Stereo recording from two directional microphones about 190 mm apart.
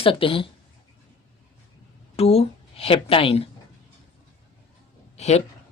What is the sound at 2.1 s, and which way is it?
A woman's voice, 30° left (ahead or behind).